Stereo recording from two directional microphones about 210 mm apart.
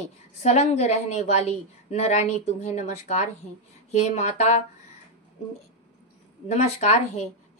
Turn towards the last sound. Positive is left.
turn(degrees=30)  # may be behind; listen again after turning